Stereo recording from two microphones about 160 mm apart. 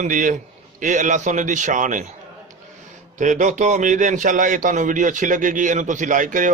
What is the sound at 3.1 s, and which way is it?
A man's voice, 50° right (ahead or behind).